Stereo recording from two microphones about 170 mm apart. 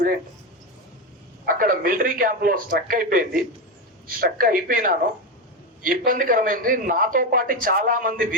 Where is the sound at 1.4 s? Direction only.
55° right (ahead or behind).